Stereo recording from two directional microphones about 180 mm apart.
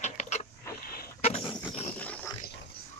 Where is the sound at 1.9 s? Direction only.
10° left (ahead or behind).